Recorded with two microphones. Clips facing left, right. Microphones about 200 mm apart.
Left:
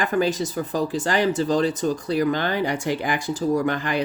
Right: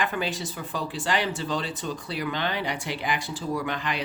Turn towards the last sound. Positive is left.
turn(degrees=45)  # may be behind; listen again after turning